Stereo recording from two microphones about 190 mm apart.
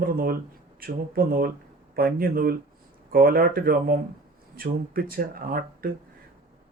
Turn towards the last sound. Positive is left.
turn(degrees=-50)  # may be behind; listen again after turning